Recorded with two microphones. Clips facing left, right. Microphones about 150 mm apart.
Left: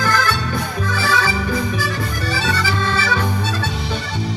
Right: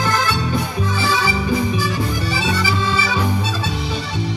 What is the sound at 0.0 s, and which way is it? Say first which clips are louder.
Music: even; 20° right (ahead or behind).